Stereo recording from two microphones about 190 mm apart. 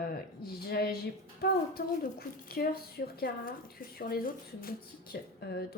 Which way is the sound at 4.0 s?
50° left (ahead or behind).